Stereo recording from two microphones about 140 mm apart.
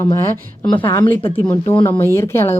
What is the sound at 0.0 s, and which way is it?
A woman's voice, 20° left (ahead or behind).